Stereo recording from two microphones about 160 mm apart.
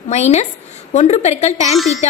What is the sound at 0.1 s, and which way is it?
A woman's voice, 45° left (ahead or behind).